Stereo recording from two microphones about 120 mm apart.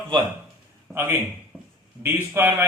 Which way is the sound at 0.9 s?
20° right (ahead or behind).